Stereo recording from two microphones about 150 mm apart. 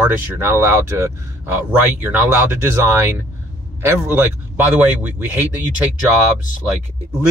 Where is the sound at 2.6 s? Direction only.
15° right (ahead or behind).